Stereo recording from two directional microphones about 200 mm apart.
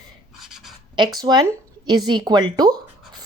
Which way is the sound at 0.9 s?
20° right (ahead or behind).